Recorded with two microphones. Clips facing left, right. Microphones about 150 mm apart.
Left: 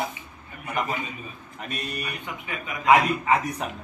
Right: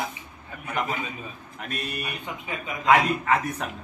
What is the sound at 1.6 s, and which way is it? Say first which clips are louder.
Speech: even; centre (ahead or behind).